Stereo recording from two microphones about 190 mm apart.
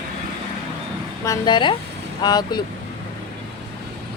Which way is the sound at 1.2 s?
20° left (ahead or behind).